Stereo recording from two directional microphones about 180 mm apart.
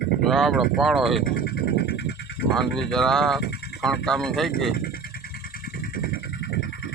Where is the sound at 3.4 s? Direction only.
65° left (ahead or behind).